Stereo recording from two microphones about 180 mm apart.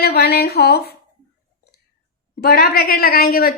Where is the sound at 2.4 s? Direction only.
60° left (ahead or behind).